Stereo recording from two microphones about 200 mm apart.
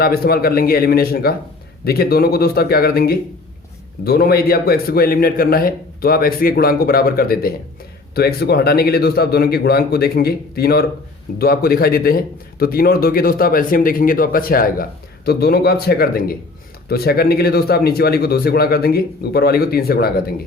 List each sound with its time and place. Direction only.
0.0 s a man's voice: 50° left (ahead or behind)